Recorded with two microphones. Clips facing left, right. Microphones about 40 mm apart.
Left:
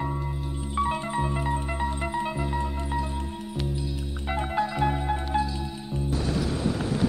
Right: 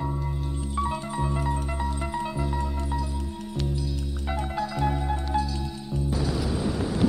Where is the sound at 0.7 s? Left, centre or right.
Left.